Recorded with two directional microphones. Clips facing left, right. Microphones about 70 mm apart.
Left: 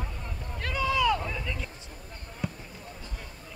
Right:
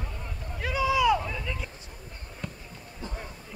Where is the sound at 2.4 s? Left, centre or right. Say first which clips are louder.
Left 5 dB; centre.